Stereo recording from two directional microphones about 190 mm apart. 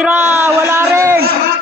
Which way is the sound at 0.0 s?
10° right (ahead or behind).